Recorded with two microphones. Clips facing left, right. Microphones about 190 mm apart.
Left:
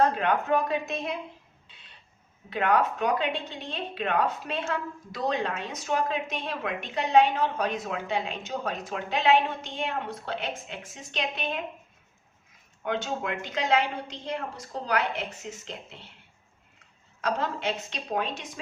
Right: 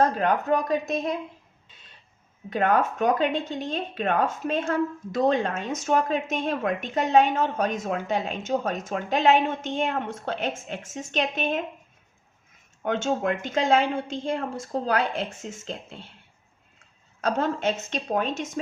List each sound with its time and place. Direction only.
0.0 s a woman's voice: 40° right (ahead or behind)
1.6 s music: 45° right (ahead or behind)
2.5 s speech: 45° right (ahead or behind)
12.8 s speech: 45° right (ahead or behind)
17.2 s speech: 45° right (ahead or behind)